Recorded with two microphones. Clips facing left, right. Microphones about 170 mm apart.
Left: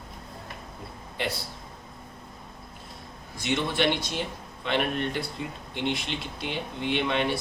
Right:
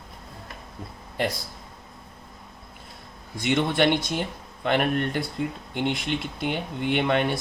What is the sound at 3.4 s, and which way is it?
Speech, 55° right (ahead or behind).